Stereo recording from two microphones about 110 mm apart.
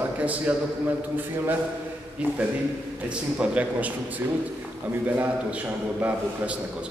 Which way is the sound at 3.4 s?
10° right (ahead or behind).